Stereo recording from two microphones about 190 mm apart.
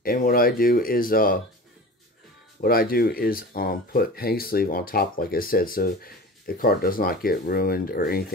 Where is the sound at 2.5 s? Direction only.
50° left (ahead or behind).